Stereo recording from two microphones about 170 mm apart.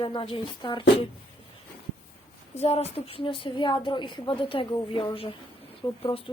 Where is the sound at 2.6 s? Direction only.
35° left (ahead or behind).